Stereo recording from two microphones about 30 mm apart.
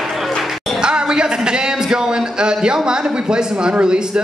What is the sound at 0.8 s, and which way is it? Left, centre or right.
A man's voice, right.